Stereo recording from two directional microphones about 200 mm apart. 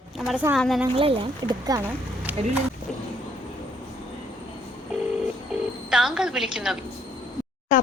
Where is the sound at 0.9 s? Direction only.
25° right (ahead or behind).